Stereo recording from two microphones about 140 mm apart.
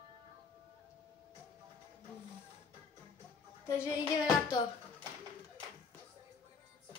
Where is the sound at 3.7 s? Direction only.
15° left (ahead or behind).